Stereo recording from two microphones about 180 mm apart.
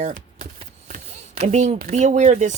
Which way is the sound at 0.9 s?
50° right (ahead or behind).